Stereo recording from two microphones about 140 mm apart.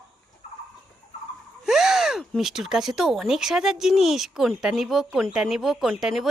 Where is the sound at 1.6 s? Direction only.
5° right (ahead or behind).